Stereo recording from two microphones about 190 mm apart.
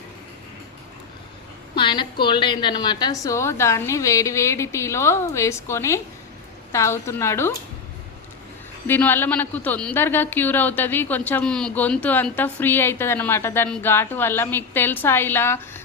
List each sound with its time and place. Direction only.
1.7 s a woman's voice: 25° left (ahead or behind)
8.9 s speech: 10° left (ahead or behind)